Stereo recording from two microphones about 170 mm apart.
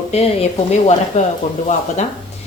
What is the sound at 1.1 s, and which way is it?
Speech, 45° left (ahead or behind).